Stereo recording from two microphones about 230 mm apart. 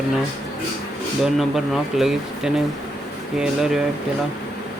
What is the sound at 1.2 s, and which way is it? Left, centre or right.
Speech, centre.